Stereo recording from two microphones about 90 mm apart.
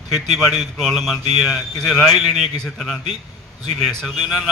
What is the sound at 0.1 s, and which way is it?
A man's voice, 5° left (ahead or behind).